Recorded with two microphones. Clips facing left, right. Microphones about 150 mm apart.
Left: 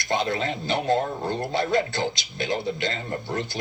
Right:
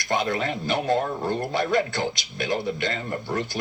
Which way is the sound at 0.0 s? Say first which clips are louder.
Even; 50° right (ahead or behind).